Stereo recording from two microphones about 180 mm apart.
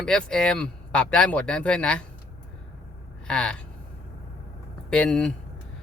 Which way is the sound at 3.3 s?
5° left (ahead or behind).